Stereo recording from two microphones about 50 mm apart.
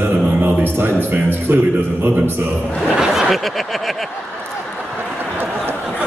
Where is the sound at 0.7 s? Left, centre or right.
Right.